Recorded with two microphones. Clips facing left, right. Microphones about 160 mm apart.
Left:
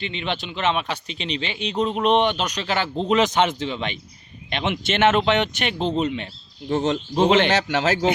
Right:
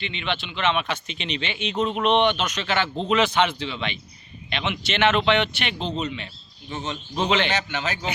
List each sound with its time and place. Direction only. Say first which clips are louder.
0.0 s speech: left 2 dB; 40° left (ahead or behind)
6.0 s speech: left 6 dB; 55° left (ahead or behind)
7.5 s speech: left 7 dB; 90° left